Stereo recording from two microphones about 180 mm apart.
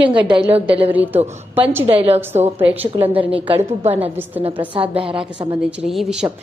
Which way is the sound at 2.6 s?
10° right (ahead or behind).